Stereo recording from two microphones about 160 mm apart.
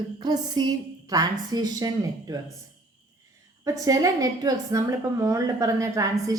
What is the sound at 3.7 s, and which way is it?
A woman's voice, 20° right (ahead or behind).